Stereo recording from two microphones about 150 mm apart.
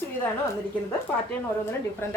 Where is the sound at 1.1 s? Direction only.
10° left (ahead or behind).